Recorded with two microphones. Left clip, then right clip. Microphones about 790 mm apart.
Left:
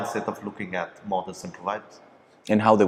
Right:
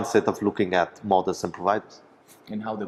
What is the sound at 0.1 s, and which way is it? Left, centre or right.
Speech, right.